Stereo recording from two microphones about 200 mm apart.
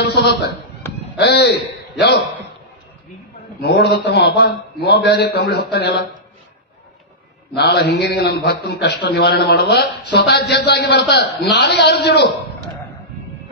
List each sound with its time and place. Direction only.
0.0 s a sound: 55° left (ahead or behind)
1.1 s a man's voice: 55° left (ahead or behind)
3.6 s a man's voice: 55° left (ahead or behind)
7.5 s a man's voice: 55° left (ahead or behind)